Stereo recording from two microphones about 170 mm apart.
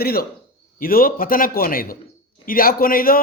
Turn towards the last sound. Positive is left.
turn(degrees=55)  # may be behind; listen again after turning